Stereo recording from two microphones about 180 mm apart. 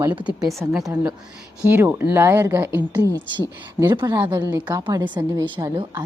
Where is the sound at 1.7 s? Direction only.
10° right (ahead or behind).